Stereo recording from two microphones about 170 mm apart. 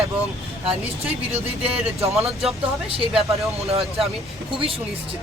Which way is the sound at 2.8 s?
35° right (ahead or behind).